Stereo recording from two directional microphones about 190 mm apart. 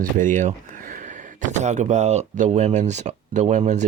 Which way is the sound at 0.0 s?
45° right (ahead or behind).